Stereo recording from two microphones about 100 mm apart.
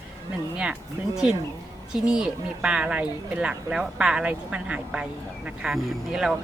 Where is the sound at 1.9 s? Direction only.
5° right (ahead or behind).